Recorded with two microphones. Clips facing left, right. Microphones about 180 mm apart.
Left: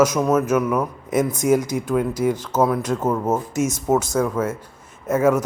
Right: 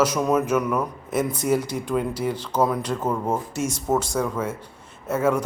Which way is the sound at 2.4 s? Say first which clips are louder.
Left 3 dB; 5° left (ahead or behind).